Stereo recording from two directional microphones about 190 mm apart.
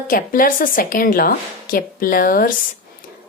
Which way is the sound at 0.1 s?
45° left (ahead or behind).